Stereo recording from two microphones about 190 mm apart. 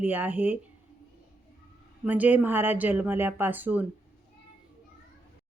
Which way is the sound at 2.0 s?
10° right (ahead or behind).